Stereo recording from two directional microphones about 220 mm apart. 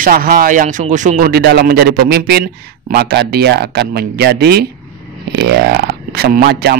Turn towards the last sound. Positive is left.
turn(degrees=-45)  # may be behind; listen again after turning